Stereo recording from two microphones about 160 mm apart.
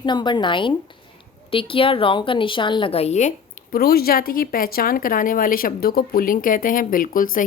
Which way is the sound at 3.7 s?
75° left (ahead or behind).